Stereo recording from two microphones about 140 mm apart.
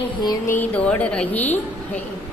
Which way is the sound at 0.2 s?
30° left (ahead or behind).